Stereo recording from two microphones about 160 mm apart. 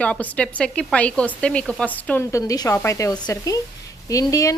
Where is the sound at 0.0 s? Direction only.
5° left (ahead or behind).